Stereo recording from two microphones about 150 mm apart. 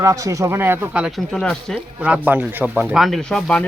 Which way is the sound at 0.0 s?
20° right (ahead or behind).